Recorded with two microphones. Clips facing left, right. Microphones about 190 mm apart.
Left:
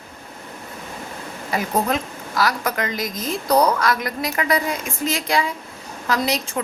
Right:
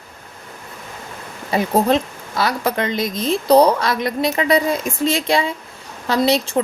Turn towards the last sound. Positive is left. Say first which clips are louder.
# right 6 dB
turn(degrees=-30)  # may be behind; listen again after turning